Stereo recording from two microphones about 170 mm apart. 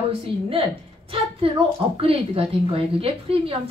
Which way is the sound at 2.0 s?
35° right (ahead or behind).